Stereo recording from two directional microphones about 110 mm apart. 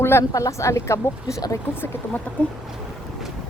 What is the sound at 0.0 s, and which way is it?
Speech, 25° left (ahead or behind).